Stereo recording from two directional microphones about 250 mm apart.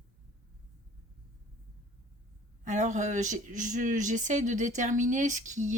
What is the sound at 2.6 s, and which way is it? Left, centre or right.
Speech, right.